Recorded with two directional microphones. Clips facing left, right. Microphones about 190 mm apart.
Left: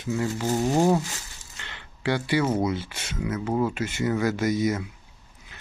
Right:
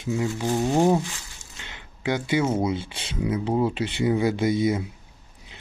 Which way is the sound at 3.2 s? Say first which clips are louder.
Right 2 dB; 15° right (ahead or behind).